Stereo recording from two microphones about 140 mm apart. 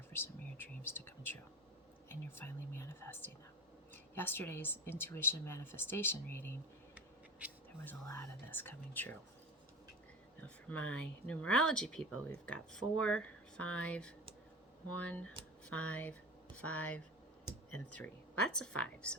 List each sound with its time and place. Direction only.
0.1 s speech: 15° left (ahead or behind)
2.4 s speech: 15° left (ahead or behind)
6.9 s a sound: 10° right (ahead or behind)
7.9 s speech: 15° left (ahead or behind)
10.4 s speech: 10° left (ahead or behind)